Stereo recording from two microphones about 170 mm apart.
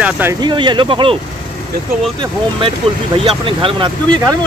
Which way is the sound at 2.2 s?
30° right (ahead or behind).